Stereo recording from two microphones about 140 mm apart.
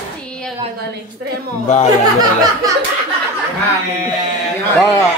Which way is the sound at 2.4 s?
25° right (ahead or behind).